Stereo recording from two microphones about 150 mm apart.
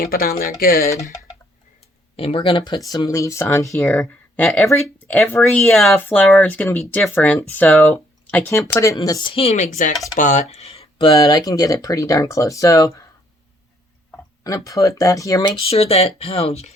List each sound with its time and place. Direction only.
0.0 s speech: 75° left (ahead or behind)
2.1 s speech: 35° left (ahead or behind); by 10.4 s 55° left (ahead or behind)
10.5 s speech: 40° left (ahead or behind); by 13.0 s 20° left (ahead or behind)
14.4 s speech: 20° left (ahead or behind)
15.7 s speech: 40° left (ahead or behind)